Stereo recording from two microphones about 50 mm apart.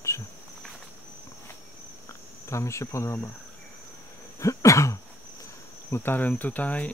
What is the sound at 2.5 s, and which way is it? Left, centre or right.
Insect, left.